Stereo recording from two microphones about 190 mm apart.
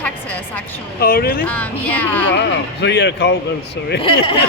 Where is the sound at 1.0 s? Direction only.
50° left (ahead or behind).